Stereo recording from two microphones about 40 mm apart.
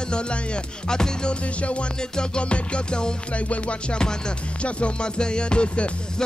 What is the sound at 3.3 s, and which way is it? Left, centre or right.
Music, left.